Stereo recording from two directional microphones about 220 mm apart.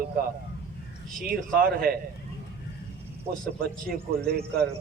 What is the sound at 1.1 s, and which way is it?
Speech, 40° right (ahead or behind).